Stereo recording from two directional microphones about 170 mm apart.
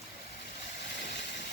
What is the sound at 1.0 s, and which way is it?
Vehicle, 90° left.